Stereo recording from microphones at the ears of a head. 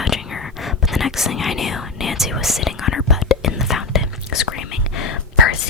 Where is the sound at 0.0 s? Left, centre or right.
Left.